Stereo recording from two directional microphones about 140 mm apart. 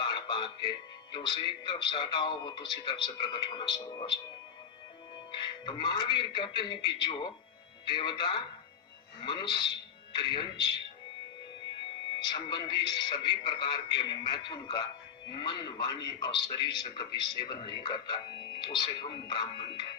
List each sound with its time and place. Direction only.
0.0 s a man's voice: 35° left (ahead or behind)
5.3 s a man's voice: 35° left (ahead or behind)
12.1 s a man's voice: 35° left (ahead or behind)